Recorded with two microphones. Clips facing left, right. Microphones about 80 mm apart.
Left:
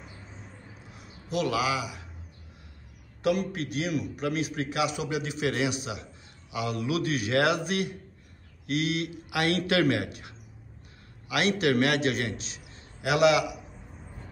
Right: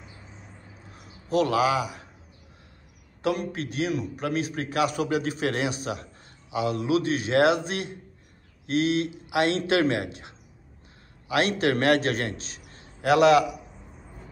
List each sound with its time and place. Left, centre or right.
0.9 s a man's voice: right
3.2 s a man's voice: right
6.5 s a man's voice: right